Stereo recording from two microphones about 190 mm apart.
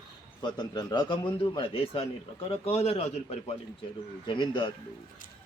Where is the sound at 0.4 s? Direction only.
25° left (ahead or behind).